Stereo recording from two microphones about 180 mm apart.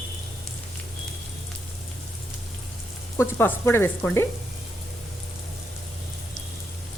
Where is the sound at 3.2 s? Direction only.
10° left (ahead or behind).